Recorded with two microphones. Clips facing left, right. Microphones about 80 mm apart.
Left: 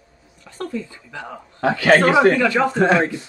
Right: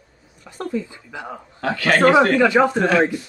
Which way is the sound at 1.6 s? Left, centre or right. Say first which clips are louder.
Left 5 dB; left.